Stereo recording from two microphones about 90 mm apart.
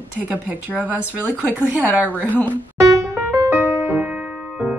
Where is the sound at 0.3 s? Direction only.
20° right (ahead or behind).